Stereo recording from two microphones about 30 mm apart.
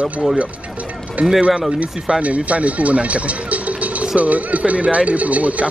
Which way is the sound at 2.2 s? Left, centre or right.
Right.